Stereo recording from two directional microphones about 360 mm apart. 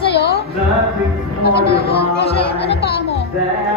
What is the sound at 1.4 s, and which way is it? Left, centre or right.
Speech, left.